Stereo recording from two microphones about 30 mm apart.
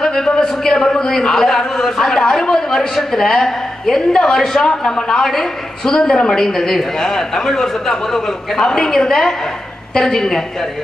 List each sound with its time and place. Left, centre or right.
0.0 s a man's voice: centre